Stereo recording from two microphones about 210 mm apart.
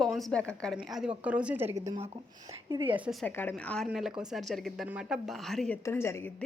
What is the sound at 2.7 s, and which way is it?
Speech, 20° right (ahead or behind).